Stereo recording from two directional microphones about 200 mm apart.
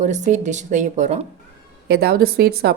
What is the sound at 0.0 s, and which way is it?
A woman's voice, 35° right (ahead or behind).